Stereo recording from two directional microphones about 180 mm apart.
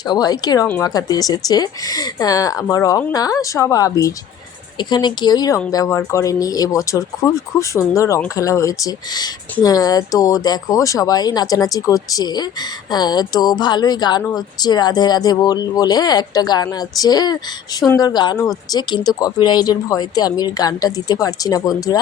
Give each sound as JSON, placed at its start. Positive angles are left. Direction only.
{"t": 0.0, "sound": "speech", "side_deg": 20}